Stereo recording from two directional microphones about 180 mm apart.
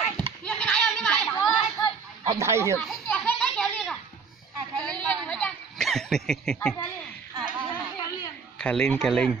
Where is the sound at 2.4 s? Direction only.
15° right (ahead or behind).